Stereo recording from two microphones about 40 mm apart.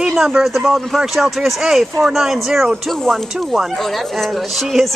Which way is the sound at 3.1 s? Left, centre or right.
Centre.